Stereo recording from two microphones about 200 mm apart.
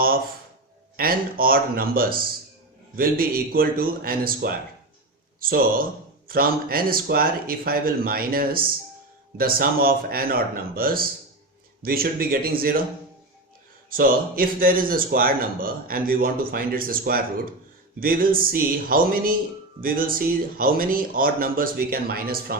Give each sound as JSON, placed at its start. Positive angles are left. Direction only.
{"t": 0.9, "sound": "a man's voice", "side_deg": -45}
{"t": 13.9, "sound": "a man's voice", "side_deg": -45}